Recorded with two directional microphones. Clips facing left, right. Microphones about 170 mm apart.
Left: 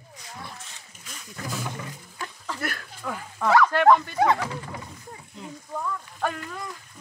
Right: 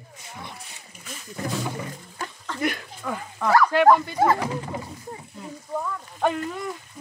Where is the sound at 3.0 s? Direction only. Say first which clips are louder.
Right 1 dB; centre (ahead or behind).